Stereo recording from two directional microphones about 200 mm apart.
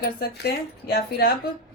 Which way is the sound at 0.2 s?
50° left (ahead or behind).